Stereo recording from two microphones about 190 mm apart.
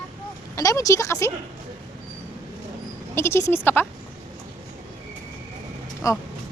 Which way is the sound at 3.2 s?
15° left (ahead or behind).